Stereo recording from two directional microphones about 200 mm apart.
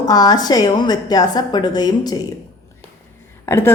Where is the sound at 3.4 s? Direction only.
15° left (ahead or behind).